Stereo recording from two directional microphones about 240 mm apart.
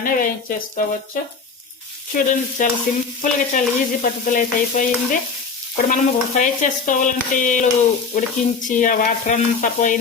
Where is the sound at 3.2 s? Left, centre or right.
Left.